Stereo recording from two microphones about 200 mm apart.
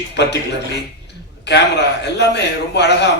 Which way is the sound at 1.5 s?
60° left (ahead or behind).